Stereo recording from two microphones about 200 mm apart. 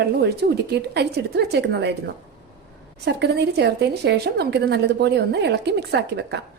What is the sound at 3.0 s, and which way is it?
A woman's voice, 55° right (ahead or behind).